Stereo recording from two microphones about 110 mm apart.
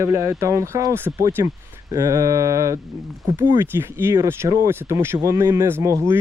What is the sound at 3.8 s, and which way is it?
Speech, 20° right (ahead or behind).